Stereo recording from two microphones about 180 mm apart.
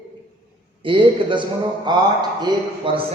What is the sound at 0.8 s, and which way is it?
Speech, 30° right (ahead or behind).